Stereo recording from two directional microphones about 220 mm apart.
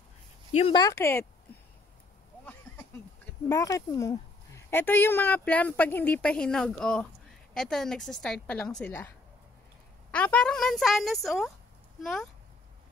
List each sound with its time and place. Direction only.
0.5 s speech: 25° left (ahead or behind); by 1.2 s 10° left (ahead or behind)
3.4 s a woman's voice: 15° left (ahead or behind)
10.1 s a woman's voice: 5° left (ahead or behind)